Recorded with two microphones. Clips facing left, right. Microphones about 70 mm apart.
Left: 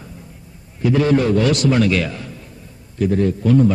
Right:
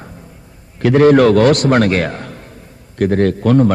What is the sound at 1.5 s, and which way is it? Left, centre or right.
A man's voice, right.